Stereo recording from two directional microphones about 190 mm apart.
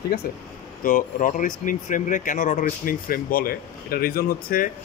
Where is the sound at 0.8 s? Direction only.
45° left (ahead or behind).